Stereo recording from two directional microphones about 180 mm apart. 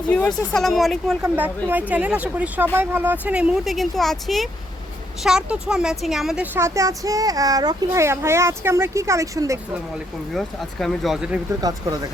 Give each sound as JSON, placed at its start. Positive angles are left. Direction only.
{"t": 0.1, "sound": "speech", "side_deg": 5}
{"t": 1.2, "sound": "a woman's voice", "side_deg": -10}
{"t": 10.3, "sound": "speech", "side_deg": 0}